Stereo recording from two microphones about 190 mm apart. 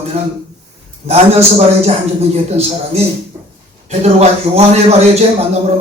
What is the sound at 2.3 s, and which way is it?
A man's voice, 35° right (ahead or behind).